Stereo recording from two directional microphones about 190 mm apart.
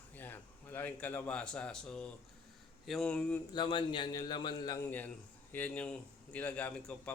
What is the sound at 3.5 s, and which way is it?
A man's voice, 25° left (ahead or behind).